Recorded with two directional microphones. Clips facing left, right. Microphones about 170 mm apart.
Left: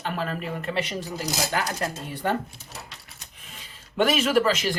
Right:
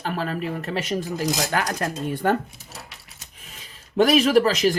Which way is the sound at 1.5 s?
55° right (ahead or behind).